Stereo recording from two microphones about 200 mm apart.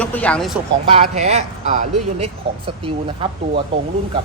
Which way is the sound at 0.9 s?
30° right (ahead or behind).